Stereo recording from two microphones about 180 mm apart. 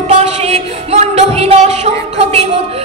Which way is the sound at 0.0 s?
35° right (ahead or behind).